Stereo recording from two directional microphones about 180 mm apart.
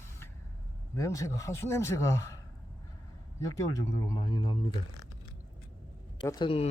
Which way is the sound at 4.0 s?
20° left (ahead or behind).